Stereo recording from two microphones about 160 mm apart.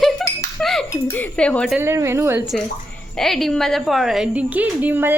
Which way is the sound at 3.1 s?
Centre (ahead or behind).